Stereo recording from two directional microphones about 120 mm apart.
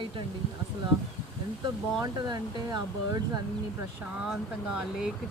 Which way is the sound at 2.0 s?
35° right (ahead or behind).